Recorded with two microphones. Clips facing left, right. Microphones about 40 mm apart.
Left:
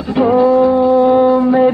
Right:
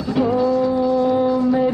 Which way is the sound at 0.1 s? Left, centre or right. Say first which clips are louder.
Left 7 dB; left.